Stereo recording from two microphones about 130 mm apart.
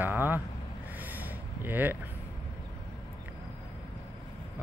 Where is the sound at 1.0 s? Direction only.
15° right (ahead or behind).